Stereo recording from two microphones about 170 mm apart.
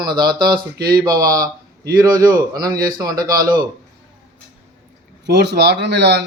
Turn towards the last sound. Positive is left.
turn(degrees=-90)